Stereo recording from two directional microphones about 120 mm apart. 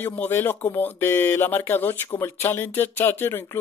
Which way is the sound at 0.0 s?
20° left (ahead or behind).